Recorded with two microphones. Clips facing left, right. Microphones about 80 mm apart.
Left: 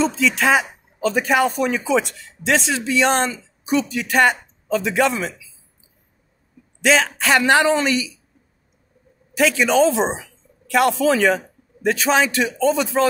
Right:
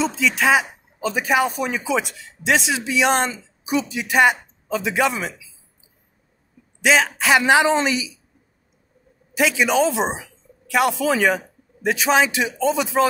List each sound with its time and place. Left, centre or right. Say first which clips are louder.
0.0 s speech: left 1 dB; centre
6.8 s speech: even; centre
9.4 s speech: left 2 dB; centre